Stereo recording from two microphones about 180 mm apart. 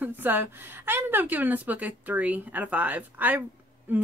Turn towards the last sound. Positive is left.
turn(degrees=-10)  # may be behind; listen again after turning